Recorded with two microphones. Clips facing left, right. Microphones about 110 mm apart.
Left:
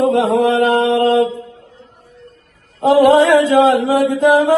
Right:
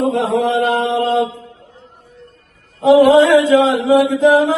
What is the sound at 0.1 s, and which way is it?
Mantra, 50° left (ahead or behind).